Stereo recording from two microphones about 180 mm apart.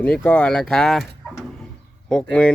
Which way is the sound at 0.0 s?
5° left (ahead or behind).